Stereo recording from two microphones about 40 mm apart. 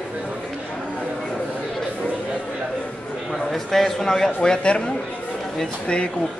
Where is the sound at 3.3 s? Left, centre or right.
Centre.